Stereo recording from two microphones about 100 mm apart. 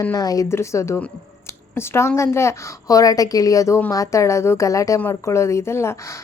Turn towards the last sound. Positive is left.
turn(degrees=25)  # may be behind; listen again after turning